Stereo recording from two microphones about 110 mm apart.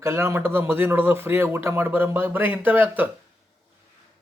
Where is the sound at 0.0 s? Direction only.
25° right (ahead or behind).